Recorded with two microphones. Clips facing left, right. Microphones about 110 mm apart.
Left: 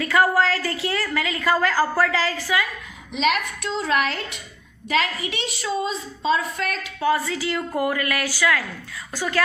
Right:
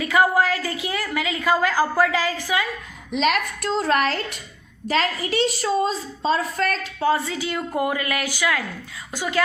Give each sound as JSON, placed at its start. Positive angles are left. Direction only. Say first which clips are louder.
{"t": 0.0, "sound": "a woman's voice", "louder": "even", "side_deg": -20}
{"t": 3.2, "sound": "a woman's voice", "louder": "right 1 dB", "side_deg": -40}